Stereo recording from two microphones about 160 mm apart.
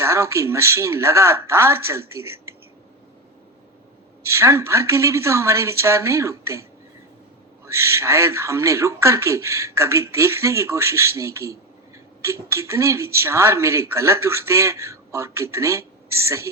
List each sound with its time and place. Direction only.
0.0 s speech: 15° right (ahead or behind)
4.2 s speech: 15° right (ahead or behind)